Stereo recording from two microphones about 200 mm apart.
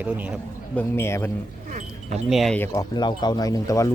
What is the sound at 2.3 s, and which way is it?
A man's voice, centre (ahead or behind).